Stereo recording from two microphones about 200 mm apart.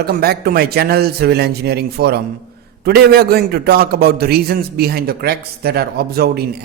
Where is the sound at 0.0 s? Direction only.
50° right (ahead or behind).